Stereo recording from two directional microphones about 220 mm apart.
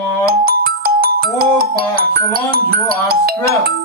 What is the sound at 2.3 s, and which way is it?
Speech, 45° right (ahead or behind).